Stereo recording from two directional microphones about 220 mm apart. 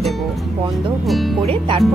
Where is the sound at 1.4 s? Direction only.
25° right (ahead or behind).